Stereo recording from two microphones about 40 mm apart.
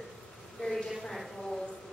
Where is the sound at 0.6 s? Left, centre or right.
Centre.